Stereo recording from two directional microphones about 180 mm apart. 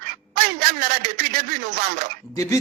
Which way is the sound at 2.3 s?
20° left (ahead or behind).